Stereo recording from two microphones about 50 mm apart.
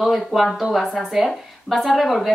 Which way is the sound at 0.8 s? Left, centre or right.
Centre.